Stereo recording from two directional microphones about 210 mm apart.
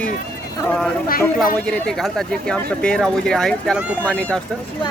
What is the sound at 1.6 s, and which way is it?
Speech, 5° left (ahead or behind).